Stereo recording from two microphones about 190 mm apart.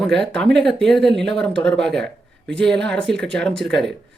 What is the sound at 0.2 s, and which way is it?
Speech, 5° left (ahead or behind).